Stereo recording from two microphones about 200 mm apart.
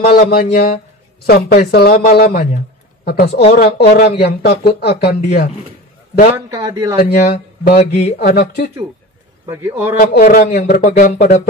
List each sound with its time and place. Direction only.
0.0 s speech: 50° left (ahead or behind)
6.3 s speech: 15° right (ahead or behind)
7.0 s speech: 50° left (ahead or behind)
7.7 s speech: 35° left (ahead or behind)
9.5 s speech: 10° right (ahead or behind)
9.9 s speech: 45° left (ahead or behind)